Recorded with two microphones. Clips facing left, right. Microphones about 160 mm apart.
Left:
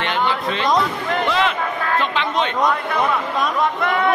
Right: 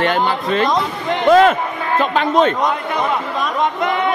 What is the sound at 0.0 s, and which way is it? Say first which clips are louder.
A man's voice: right 4 dB; 45° right (ahead or behind).